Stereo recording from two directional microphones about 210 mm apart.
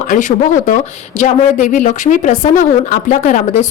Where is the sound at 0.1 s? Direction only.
40° left (ahead or behind).